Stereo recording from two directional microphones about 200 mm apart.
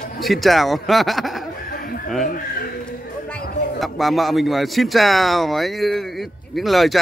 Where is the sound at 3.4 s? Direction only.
50° left (ahead or behind).